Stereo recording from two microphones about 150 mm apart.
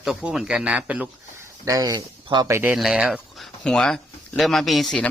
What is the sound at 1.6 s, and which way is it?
Speech, 25° right (ahead or behind).